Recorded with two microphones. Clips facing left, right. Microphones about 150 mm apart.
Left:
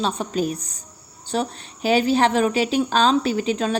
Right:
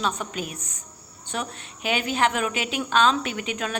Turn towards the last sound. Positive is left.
turn(degrees=30)  # may be behind; listen again after turning